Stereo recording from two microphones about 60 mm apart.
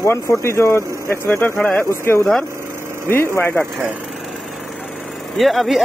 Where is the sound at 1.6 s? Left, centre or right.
Left.